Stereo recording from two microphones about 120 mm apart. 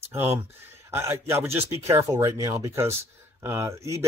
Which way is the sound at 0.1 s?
20° right (ahead or behind).